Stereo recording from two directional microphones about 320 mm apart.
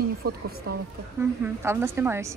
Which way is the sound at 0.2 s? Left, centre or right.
Right.